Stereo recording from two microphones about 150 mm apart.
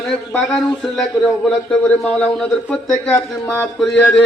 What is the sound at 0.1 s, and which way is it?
Speech, 5° left (ahead or behind).